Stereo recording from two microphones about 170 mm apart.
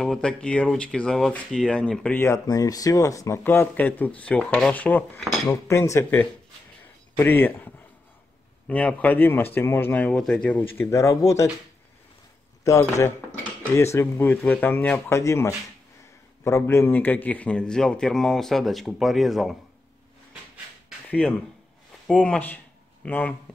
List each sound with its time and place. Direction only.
0.0 s speech: 5° left (ahead or behind); by 11.5 s 20° left (ahead or behind)
12.6 s a man's voice: 20° left (ahead or behind); by 19.5 s centre (ahead or behind)
21.1 s a man's voice: 10° left (ahead or behind)